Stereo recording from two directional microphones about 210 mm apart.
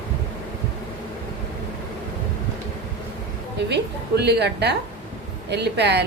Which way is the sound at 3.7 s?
55° right (ahead or behind).